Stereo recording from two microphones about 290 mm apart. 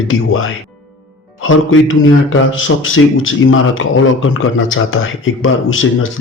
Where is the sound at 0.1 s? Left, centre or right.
Left.